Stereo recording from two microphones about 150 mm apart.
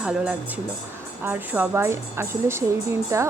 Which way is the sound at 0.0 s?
5° right (ahead or behind).